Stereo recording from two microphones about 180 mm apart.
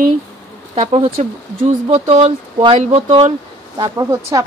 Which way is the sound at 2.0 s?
30° right (ahead or behind).